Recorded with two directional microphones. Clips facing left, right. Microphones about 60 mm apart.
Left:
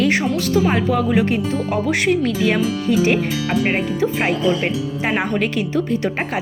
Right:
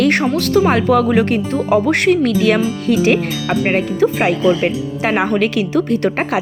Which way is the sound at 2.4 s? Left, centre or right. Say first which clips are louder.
Right 3 dB; right.